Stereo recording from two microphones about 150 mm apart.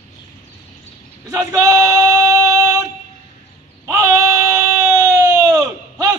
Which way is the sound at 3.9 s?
20° right (ahead or behind).